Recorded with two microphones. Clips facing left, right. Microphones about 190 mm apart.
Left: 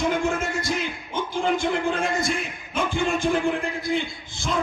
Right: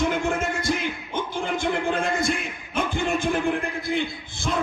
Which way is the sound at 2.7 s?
55° right (ahead or behind).